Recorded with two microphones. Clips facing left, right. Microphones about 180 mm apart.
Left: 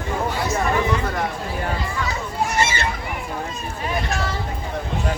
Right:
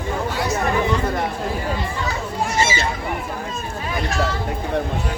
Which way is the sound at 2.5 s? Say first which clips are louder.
Right 2 dB; 60° left (ahead or behind).